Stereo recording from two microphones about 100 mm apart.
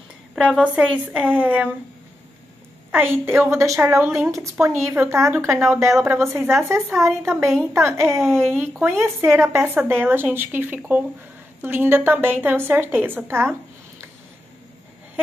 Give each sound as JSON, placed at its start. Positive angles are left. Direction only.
{"t": 0.4, "sound": "a woman's voice", "side_deg": -10}
{"t": 2.9, "sound": "a woman's voice", "side_deg": -20}